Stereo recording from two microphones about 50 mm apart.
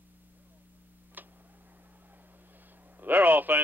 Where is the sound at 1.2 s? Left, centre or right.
Right.